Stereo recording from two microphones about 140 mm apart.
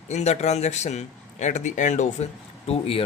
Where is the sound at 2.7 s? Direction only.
45° left (ahead or behind).